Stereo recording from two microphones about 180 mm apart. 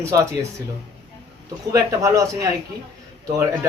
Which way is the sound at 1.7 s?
20° right (ahead or behind).